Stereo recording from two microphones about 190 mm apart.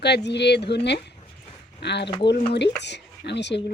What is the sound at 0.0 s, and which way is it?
Speech, 65° left (ahead or behind).